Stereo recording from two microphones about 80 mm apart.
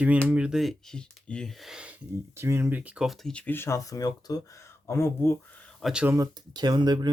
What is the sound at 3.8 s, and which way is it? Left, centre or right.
Speech, left.